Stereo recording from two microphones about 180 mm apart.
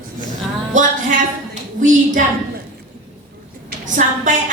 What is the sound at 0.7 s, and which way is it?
A woman's voice, 45° right (ahead or behind).